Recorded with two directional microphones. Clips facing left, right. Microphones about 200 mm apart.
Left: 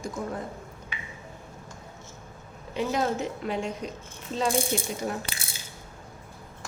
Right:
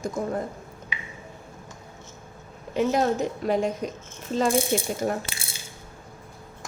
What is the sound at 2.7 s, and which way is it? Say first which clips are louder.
Speech: right 4 dB; 45° right (ahead or behind).